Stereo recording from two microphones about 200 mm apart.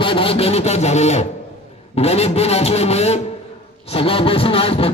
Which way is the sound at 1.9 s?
30° left (ahead or behind).